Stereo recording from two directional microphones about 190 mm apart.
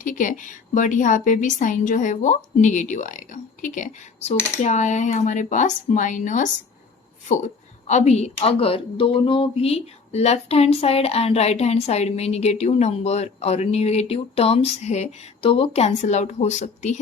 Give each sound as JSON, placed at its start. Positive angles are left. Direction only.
{"t": 0.0, "sound": "speech", "side_deg": 45}
{"t": 7.9, "sound": "speech", "side_deg": 35}